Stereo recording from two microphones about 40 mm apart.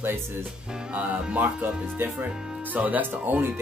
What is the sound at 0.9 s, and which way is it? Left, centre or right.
Speech, right.